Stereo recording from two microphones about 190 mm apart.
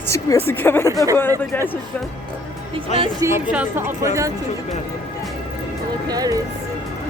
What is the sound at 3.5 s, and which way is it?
Speech, 10° right (ahead or behind).